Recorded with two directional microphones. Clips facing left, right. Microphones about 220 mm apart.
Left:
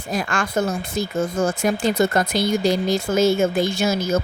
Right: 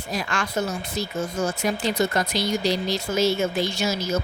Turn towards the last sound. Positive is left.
turn(degrees=50)  # may be behind; listen again after turning